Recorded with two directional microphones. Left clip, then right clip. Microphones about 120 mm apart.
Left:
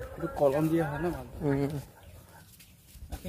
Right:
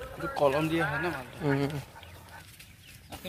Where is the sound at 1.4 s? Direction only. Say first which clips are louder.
Right 1 dB; 20° left (ahead or behind).